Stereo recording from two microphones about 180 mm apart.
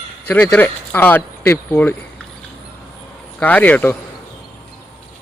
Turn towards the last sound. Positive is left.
turn(degrees=10)  # may be behind; listen again after turning